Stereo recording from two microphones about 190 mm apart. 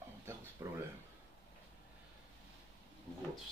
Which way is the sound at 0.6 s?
10° right (ahead or behind).